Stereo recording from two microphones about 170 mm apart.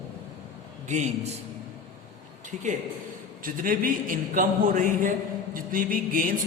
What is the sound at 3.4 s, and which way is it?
A man's voice, 55° right (ahead or behind).